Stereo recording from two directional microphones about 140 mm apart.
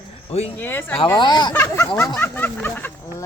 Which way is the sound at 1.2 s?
30° left (ahead or behind).